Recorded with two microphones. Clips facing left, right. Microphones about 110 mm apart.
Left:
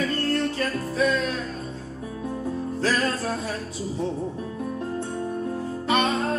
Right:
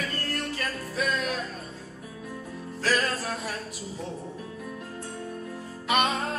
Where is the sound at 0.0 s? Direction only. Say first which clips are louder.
Left 8 dB; 30° left (ahead or behind).